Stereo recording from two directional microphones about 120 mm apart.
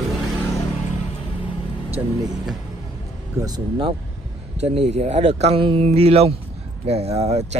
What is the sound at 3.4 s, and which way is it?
Speech, 25° right (ahead or behind).